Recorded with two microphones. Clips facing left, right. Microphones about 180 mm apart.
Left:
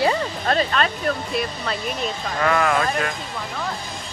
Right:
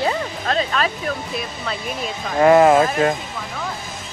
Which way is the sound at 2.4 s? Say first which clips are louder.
Right 9 dB; 25° right (ahead or behind).